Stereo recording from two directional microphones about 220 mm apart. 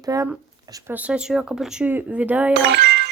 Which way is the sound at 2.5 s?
55° right (ahead or behind).